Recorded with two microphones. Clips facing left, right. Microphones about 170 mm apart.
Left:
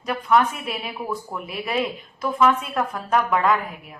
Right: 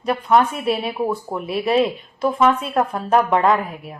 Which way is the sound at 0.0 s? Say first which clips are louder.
Right 3 dB; 30° right (ahead or behind).